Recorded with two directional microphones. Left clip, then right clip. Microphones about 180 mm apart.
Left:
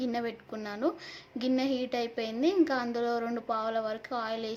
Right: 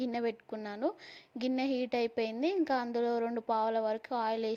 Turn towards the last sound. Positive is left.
turn(degrees=-40)  # may be behind; listen again after turning